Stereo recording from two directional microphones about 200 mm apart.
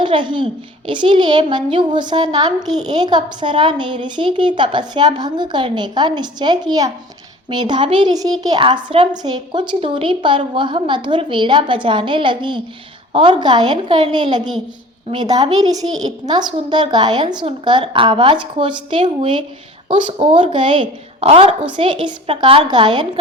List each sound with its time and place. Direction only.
0.0 s a child's voice: 25° right (ahead or behind)